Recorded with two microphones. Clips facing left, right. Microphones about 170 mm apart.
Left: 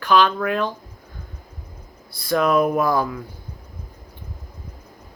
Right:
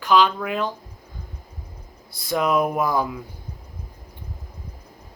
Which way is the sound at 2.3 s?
15° right (ahead or behind).